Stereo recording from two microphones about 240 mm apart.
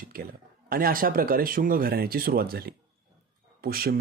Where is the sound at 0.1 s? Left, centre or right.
Right.